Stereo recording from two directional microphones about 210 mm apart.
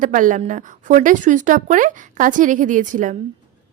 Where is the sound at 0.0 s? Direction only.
40° right (ahead or behind).